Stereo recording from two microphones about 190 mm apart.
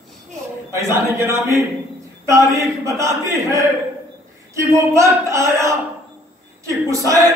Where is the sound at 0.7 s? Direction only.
15° right (ahead or behind).